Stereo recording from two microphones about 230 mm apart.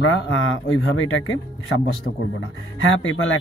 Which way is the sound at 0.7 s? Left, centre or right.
Left.